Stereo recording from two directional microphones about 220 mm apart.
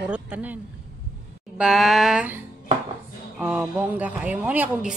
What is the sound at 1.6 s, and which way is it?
A woman's voice, centre (ahead or behind).